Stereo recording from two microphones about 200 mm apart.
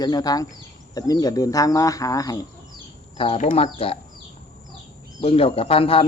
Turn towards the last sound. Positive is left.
turn(degrees=30)  # may be behind; listen again after turning